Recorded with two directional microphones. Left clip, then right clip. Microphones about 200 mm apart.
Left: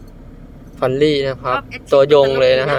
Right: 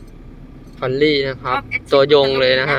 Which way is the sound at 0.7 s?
15° left (ahead or behind).